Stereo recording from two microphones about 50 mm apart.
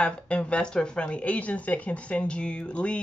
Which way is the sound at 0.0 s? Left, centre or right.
Left.